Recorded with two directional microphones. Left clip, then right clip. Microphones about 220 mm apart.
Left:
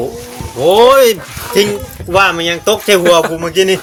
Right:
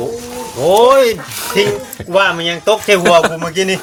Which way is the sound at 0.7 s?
50° left (ahead or behind).